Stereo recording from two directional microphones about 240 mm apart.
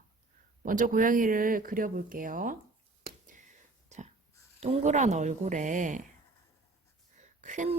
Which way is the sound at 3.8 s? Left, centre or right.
Right.